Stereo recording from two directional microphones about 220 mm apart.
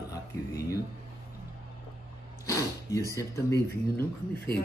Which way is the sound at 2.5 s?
15° left (ahead or behind).